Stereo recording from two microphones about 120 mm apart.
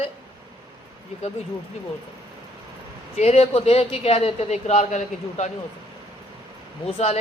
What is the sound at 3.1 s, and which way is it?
Speech, 65° left (ahead or behind).